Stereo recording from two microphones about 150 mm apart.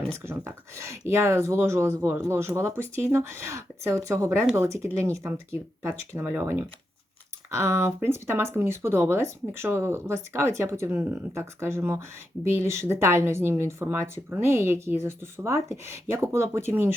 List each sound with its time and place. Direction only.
0.1 s speech: 15° right (ahead or behind)